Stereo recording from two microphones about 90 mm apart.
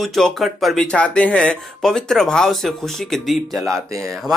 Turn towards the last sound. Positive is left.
turn(degrees=-35)  # may be behind; listen again after turning